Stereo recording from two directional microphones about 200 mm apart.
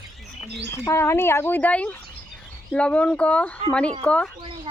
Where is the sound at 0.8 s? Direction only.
15° left (ahead or behind).